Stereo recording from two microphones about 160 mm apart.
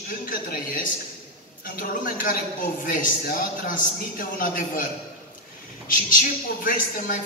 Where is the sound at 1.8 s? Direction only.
60° left (ahead or behind).